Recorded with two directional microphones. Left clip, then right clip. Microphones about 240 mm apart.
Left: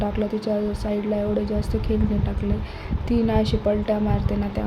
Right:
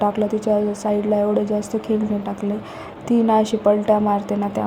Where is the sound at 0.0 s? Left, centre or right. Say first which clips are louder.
Right 6 dB; centre.